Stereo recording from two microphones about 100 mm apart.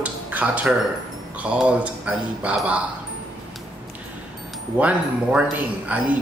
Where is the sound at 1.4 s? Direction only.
10° right (ahead or behind).